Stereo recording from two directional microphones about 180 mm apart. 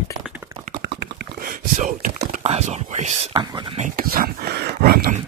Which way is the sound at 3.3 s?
25° right (ahead or behind).